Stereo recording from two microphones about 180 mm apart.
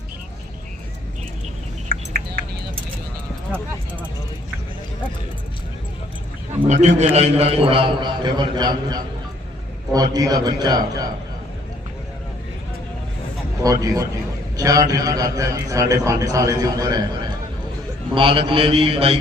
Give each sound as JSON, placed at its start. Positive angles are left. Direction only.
{"t": 6.7, "sound": "a man's voice", "side_deg": -40}
{"t": 13.6, "sound": "a man's voice", "side_deg": -20}